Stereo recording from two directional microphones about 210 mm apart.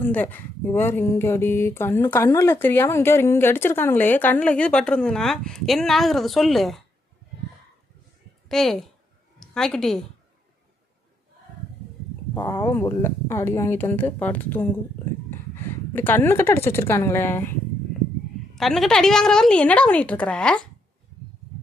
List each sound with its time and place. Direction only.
0.0 s speech: 10° left (ahead or behind)
8.4 s a woman's voice: centre (ahead or behind)
12.3 s speech: 10° left (ahead or behind)
15.9 s speech: 10° left (ahead or behind)
18.5 s a woman's voice: centre (ahead or behind)